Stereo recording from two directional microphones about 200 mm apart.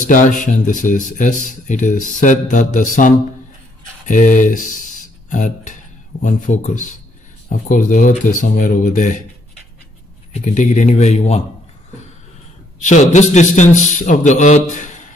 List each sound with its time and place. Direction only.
0.0 s speech: 40° left (ahead or behind)
4.1 s speech: 40° left (ahead or behind)
10.3 s speech: 40° left (ahead or behind)
12.8 s speech: 35° left (ahead or behind)